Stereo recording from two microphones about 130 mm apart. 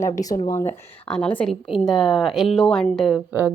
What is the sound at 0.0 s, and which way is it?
Speech, 25° left (ahead or behind).